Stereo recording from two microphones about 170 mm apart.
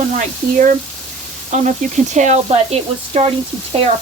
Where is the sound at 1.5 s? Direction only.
45° right (ahead or behind).